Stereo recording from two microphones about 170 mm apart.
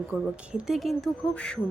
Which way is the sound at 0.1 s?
5° right (ahead or behind).